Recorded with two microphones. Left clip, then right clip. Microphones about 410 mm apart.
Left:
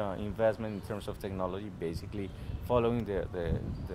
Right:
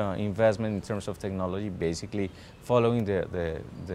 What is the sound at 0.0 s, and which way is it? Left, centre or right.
Speech, right.